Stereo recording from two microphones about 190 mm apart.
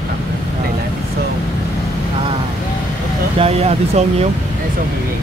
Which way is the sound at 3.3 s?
30° right (ahead or behind).